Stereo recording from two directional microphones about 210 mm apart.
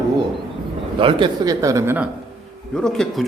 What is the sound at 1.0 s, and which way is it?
Speech, 25° right (ahead or behind).